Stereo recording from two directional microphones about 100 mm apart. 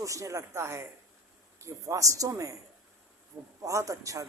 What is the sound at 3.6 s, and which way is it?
Speech, 30° right (ahead or behind).